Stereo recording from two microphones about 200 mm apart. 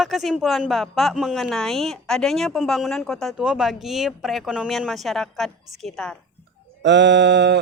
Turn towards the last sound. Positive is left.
turn(degrees=-60)  # may be behind; listen again after turning